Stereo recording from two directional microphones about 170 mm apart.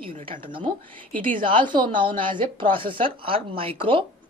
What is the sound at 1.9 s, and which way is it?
A woman's voice, 30° right (ahead or behind).